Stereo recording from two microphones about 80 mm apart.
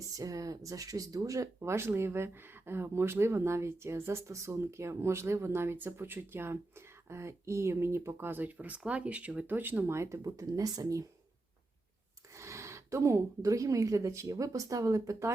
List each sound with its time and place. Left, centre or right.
0.1 s speech: right
1.5 s speech: right
12.4 s speech: right